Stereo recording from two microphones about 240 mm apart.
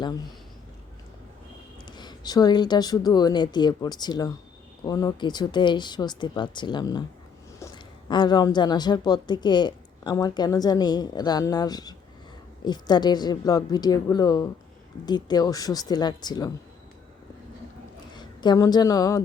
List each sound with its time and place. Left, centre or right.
1.8 s a woman's voice: centre
18.1 s a woman's voice: centre